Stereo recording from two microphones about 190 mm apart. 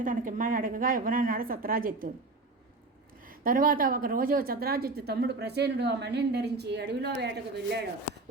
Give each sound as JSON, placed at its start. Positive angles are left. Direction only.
{"t": 0.0, "sound": "a woman's voice", "side_deg": -45}
{"t": 3.2, "sound": "a woman's voice", "side_deg": -50}